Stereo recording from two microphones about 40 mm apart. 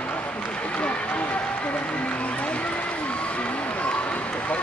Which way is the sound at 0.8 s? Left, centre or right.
Left.